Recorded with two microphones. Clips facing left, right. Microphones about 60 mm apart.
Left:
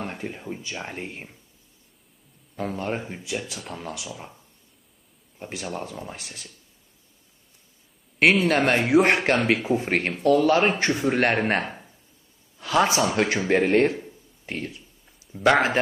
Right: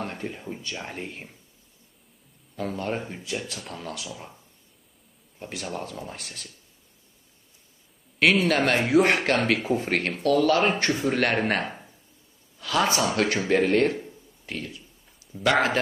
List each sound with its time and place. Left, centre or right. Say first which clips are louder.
0.0 s speech: even; centre
2.5 s a man's voice: left 1 dB; centre
5.4 s speech: left 1 dB; centre
8.2 s speech: left 2 dB; left
8.5 s speech: left 2 dB; centre
8.8 s speech: left 1 dB; left
12.5 s a sound: left 3 dB; left
12.8 s a man's voice: left 2 dB; centre